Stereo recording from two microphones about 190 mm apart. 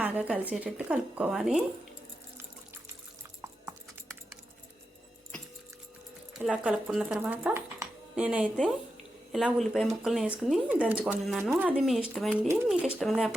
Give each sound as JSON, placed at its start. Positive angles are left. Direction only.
{"t": 0.0, "sound": "speech", "side_deg": -5}
{"t": 6.4, "sound": "speech", "side_deg": -5}